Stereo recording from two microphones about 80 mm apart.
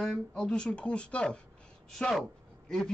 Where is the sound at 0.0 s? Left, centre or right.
Centre.